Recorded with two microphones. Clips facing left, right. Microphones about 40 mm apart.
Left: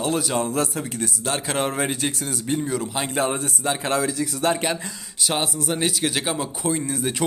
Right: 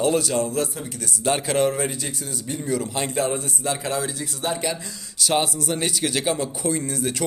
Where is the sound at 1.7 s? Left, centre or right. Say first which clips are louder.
Left 2 dB; left.